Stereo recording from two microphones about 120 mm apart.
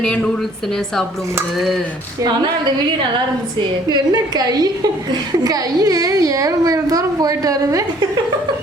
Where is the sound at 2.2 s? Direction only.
35° right (ahead or behind).